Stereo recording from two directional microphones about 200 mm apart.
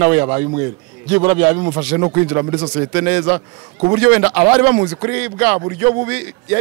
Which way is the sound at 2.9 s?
10° right (ahead or behind).